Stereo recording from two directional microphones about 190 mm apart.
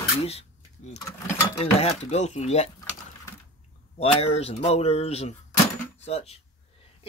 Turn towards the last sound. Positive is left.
turn(degrees=35)  # may be behind; listen again after turning